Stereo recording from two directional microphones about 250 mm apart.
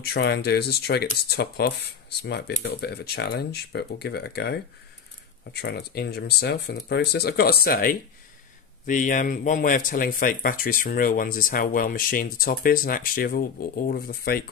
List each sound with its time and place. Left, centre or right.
0.0 s speech: left